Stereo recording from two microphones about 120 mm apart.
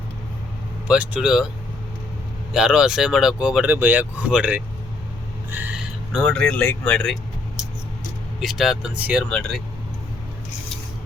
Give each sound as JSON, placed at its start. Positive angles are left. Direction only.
{"t": 0.9, "sound": "speech", "side_deg": -10}
{"t": 2.5, "sound": "speech", "side_deg": -5}
{"t": 5.5, "sound": "owl", "side_deg": -15}
{"t": 5.7, "sound": "speech", "side_deg": -5}
{"t": 8.4, "sound": "speech", "side_deg": 0}
{"t": 9.0, "sound": "speech", "side_deg": -10}